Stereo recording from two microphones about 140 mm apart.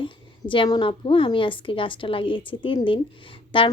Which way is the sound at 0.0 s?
35° left (ahead or behind).